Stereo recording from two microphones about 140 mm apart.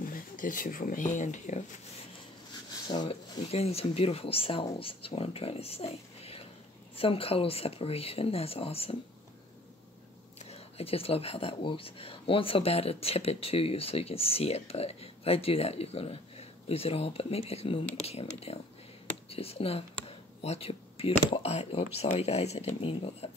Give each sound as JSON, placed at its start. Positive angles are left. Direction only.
{"t": 0.0, "sound": "speech", "side_deg": 75}
{"t": 2.9, "sound": "speech", "side_deg": 40}
{"t": 10.4, "sound": "speech", "side_deg": 45}